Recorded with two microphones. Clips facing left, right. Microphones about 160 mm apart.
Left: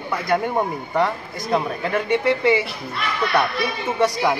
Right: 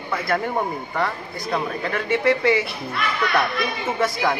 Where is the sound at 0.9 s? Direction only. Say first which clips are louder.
Left 6 dB; 20° left (ahead or behind).